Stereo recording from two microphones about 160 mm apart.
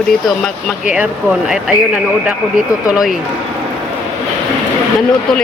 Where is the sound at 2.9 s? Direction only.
5° right (ahead or behind).